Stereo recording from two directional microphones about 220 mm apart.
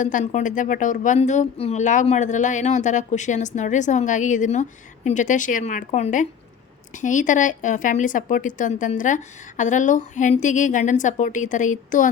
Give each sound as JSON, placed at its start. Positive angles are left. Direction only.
{"t": 0.0, "sound": "a woman's voice", "side_deg": 35}